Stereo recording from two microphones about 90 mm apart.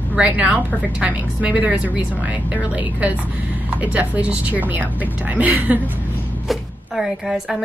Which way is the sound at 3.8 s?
15° right (ahead or behind).